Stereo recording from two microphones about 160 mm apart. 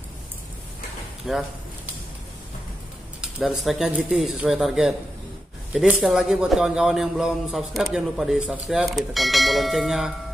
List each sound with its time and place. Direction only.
1.3 s speech: centre (ahead or behind)
3.2 s speech: 5° right (ahead or behind)